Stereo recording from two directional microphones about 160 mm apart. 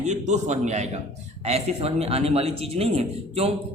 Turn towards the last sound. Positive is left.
turn(degrees=-40)  # may be behind; listen again after turning